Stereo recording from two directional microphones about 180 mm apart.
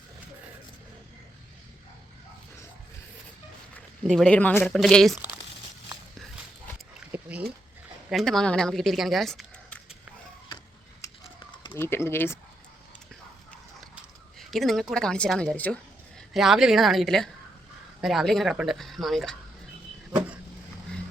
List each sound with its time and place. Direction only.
3.8 s speech: 5° left (ahead or behind)
5.1 s speech: 10° right (ahead or behind)
7.1 s a sound: 10° right (ahead or behind)
8.1 s speech: centre (ahead or behind)
11.0 s a sound: 15° left (ahead or behind)
11.7 s speech: 15° left (ahead or behind)
13.9 s speech: centre (ahead or behind)